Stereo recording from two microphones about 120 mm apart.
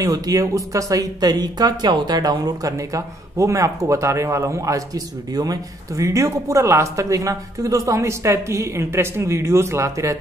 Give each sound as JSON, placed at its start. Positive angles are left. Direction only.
{"t": 0.0, "sound": "speech", "side_deg": -30}